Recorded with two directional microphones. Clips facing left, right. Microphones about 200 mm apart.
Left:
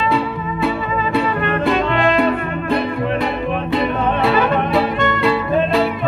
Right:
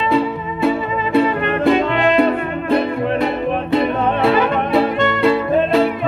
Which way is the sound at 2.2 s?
45° right (ahead or behind).